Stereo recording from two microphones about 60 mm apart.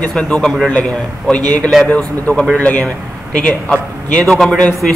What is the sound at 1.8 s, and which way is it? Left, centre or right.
Speech, left.